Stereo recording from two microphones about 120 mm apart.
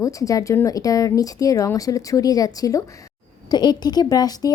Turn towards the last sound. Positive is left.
turn(degrees=35)  # may be behind; listen again after turning